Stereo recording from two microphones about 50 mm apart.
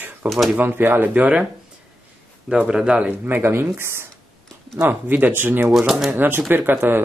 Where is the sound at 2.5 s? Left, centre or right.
Centre.